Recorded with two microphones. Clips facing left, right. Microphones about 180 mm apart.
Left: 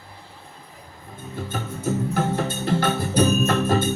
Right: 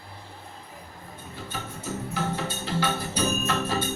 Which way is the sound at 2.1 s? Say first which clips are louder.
Left 6 dB; 50° left (ahead or behind).